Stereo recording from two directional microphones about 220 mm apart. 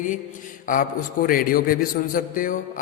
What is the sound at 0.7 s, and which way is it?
A man's voice, 40° left (ahead or behind).